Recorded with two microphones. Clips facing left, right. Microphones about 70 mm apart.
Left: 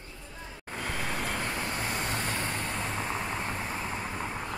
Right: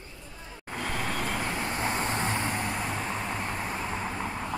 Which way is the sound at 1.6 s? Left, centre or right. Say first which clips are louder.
Right 3 dB; right.